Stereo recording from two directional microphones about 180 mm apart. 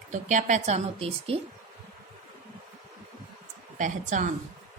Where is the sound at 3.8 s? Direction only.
45° right (ahead or behind).